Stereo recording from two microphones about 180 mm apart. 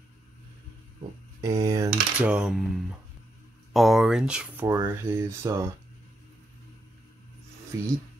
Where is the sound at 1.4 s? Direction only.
20° right (ahead or behind).